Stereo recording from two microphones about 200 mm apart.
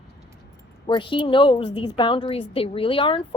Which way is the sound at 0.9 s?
25° left (ahead or behind).